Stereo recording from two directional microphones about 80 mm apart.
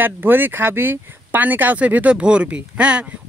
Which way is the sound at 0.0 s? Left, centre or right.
Right.